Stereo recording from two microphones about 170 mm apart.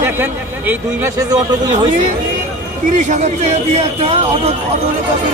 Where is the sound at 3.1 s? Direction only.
45° right (ahead or behind).